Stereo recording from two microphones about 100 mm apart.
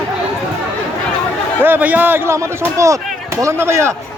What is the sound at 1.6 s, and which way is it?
Speech, 20° right (ahead or behind).